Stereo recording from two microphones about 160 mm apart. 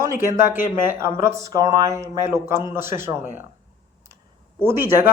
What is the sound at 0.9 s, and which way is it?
Speech, 15° right (ahead or behind).